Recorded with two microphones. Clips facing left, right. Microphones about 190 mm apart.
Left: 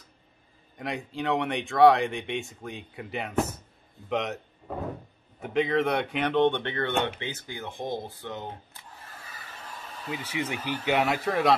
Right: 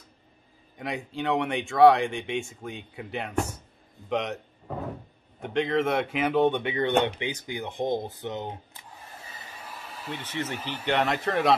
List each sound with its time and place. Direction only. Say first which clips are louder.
0.7 s speech: even; centre (ahead or behind)
5.4 s speech: even; centre (ahead or behind); by 9.5 s 20° right (ahead or behind)
9.6 s a sound: even; 5° right (ahead or behind)
10.9 s speech: even; centre (ahead or behind)